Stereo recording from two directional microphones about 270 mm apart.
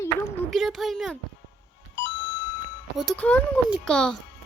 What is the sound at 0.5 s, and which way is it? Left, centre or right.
Speech, centre.